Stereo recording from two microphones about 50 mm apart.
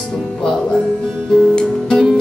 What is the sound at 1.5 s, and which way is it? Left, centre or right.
Music, centre.